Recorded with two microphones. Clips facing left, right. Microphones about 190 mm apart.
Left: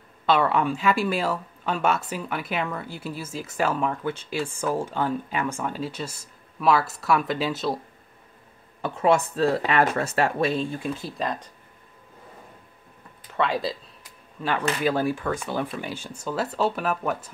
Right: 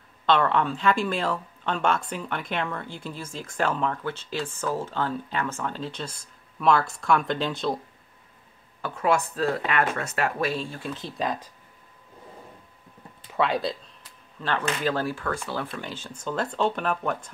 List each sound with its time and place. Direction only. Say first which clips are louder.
0.3 s speech: left 1 dB; 10° left (ahead or behind)
8.8 s speech: left 3 dB; 25° left (ahead or behind); by 11.4 s centre (ahead or behind)
13.3 s speech: even; centre (ahead or behind)